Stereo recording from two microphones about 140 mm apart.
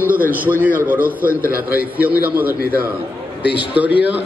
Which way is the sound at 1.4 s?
20° left (ahead or behind).